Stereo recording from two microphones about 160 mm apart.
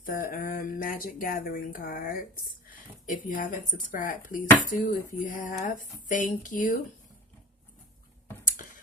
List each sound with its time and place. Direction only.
0.0 s speech: 65° left (ahead or behind)